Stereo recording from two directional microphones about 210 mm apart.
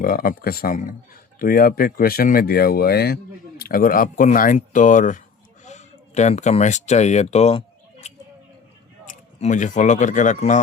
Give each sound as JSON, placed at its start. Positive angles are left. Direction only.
{"t": 0.0, "sound": "a man's voice", "side_deg": 45}
{"t": 8.0, "sound": "a sound", "side_deg": 30}
{"t": 9.0, "sound": "speech", "side_deg": 35}